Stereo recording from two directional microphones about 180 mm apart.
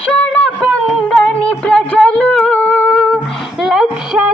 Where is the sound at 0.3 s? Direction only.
5° left (ahead or behind).